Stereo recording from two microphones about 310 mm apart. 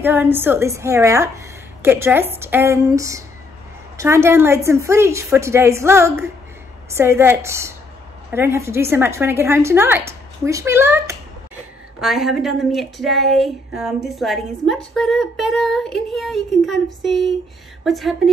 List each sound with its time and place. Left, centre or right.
0.0 s a woman's voice: centre